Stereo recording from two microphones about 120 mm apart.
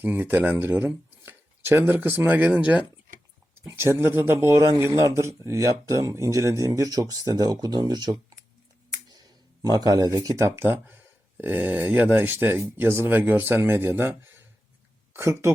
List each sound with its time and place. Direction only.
0.0 s speech: 15° right (ahead or behind)
3.7 s a man's voice: 25° right (ahead or behind)
9.6 s a man's voice: 35° right (ahead or behind)